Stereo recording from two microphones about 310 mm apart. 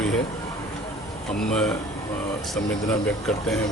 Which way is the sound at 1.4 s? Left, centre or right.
Centre.